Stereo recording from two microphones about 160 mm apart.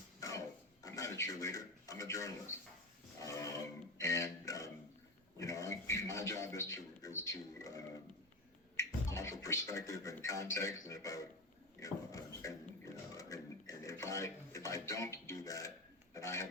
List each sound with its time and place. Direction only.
0.2 s a sound: 20° left (ahead or behind)
3.2 s roaring cats: 20° left (ahead or behind)
3.9 s guitar: 20° left (ahead or behind)
5.4 s speech: 20° left (ahead or behind)
11.8 s beatboxing: 20° left (ahead or behind)
16.1 s speech: 20° left (ahead or behind)